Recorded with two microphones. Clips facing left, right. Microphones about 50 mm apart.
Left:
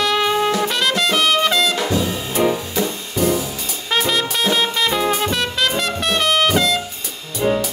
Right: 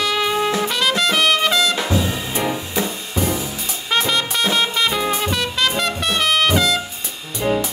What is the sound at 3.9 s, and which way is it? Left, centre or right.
Music, centre.